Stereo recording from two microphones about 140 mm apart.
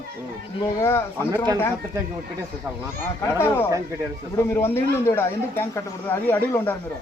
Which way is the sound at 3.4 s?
15° left (ahead or behind).